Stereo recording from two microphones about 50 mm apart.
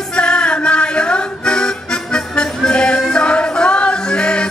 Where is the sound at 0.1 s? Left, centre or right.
Centre.